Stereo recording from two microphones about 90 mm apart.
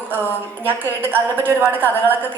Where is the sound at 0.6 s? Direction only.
20° right (ahead or behind).